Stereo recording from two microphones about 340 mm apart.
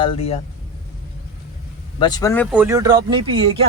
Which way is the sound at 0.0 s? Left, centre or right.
Centre.